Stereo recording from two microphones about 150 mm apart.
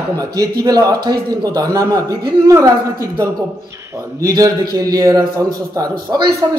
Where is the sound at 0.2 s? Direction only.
20° right (ahead or behind).